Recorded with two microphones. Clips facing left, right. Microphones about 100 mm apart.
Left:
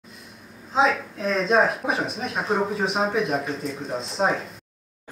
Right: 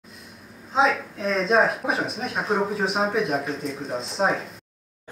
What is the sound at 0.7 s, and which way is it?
Speech, centre (ahead or behind).